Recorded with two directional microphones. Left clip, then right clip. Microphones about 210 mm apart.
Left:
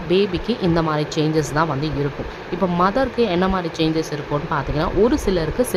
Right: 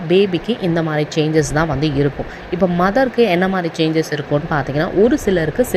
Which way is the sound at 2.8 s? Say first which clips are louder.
Right 3 dB; 10° right (ahead or behind).